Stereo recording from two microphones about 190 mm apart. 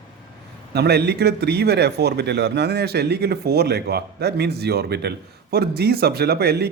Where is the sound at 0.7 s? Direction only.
60° right (ahead or behind).